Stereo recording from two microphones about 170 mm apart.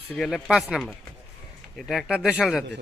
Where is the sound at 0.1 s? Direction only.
5° left (ahead or behind).